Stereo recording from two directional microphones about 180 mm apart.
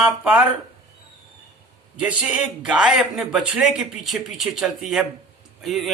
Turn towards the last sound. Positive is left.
turn(degrees=0)  # may be behind; listen again after turning